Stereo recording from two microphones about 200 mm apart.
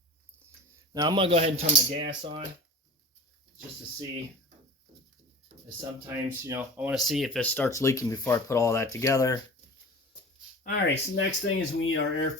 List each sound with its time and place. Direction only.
0.9 s speech: 20° right (ahead or behind)
5.8 s speech: 10° right (ahead or behind); by 9.4 s 15° left (ahead or behind)
10.6 s speech: 55° left (ahead or behind); by 12.3 s 80° left